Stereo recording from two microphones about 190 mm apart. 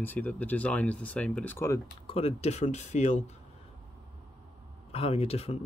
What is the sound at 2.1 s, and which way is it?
Speech, 35° left (ahead or behind).